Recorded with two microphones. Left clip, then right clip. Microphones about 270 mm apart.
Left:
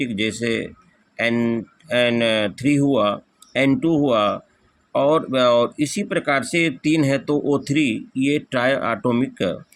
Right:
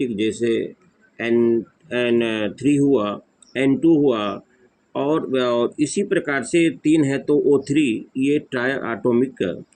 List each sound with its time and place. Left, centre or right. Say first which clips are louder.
0.0 s speech: right 2 dB; left